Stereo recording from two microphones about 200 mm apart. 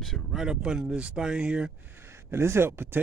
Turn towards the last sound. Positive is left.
turn(degrees=-10)  # may be behind; listen again after turning